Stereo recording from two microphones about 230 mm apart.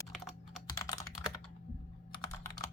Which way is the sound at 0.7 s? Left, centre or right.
Centre.